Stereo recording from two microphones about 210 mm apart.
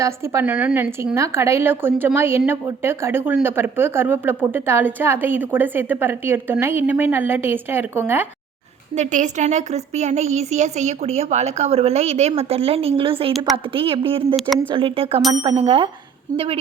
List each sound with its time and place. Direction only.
0.0 s a woman's voice: 15° right (ahead or behind)
9.0 s a woman's voice: 35° right (ahead or behind)